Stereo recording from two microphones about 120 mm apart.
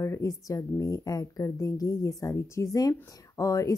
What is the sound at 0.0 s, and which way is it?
Speech, 25° left (ahead or behind).